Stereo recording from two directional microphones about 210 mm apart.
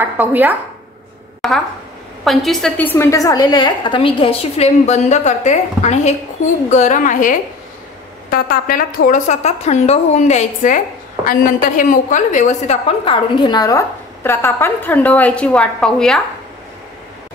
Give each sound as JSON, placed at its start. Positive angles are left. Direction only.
{"t": 0.0, "sound": "a woman's voice", "side_deg": -10}